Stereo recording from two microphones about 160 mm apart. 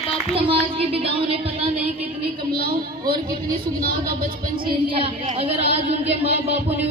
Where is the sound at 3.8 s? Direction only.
65° right (ahead or behind).